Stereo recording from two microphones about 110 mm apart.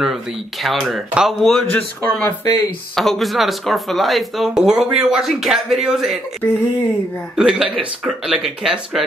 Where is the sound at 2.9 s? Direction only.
Centre (ahead or behind).